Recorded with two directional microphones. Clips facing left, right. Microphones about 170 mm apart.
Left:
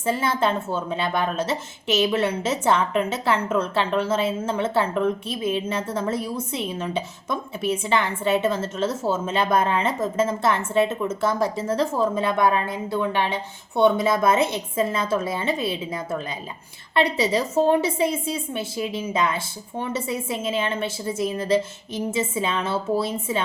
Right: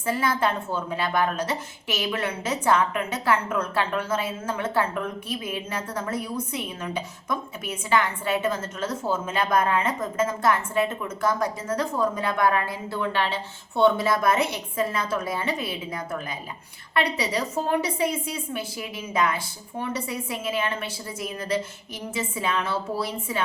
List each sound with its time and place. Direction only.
0.0 s a woman's voice: 25° left (ahead or behind)